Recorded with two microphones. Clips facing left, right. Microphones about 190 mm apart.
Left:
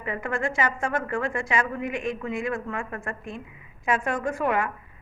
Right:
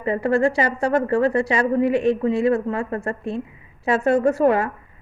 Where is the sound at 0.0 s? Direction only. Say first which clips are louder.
Right 10 dB; 35° right (ahead or behind).